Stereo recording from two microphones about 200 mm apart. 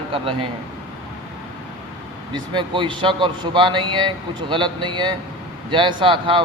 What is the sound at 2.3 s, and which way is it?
Speech, 25° right (ahead or behind).